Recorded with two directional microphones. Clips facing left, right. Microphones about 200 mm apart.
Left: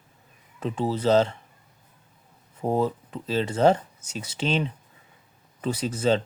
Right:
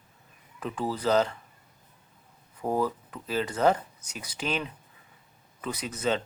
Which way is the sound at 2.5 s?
25° left (ahead or behind).